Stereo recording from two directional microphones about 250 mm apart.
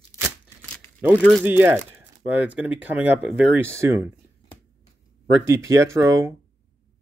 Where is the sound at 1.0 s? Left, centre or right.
Centre.